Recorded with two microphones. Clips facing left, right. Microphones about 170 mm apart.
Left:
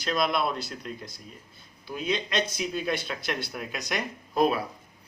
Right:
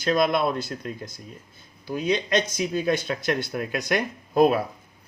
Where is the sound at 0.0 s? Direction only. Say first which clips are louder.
Right 5 dB; 50° right (ahead or behind).